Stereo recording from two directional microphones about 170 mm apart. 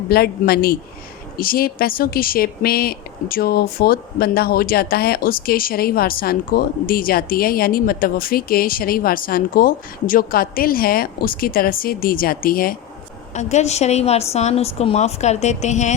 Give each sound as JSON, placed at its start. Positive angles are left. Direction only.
{"t": 0.1, "sound": "speech", "side_deg": 65}
{"t": 13.3, "sound": "a woman's voice", "side_deg": 45}